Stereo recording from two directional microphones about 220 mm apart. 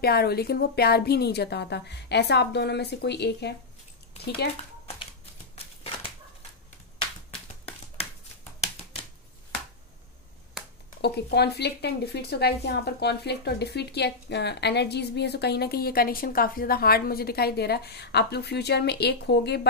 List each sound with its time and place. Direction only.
0.0 s speech: 45° left (ahead or behind)
11.0 s speech: 50° left (ahead or behind)